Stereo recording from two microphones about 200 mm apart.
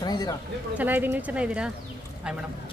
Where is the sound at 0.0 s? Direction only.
20° left (ahead or behind).